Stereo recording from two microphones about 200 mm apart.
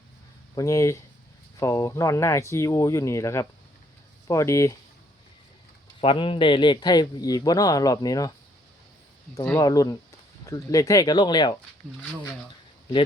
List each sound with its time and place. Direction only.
0.5 s speech: 15° left (ahead or behind)
6.0 s speech: 25° left (ahead or behind)
9.3 s speech: 15° left (ahead or behind)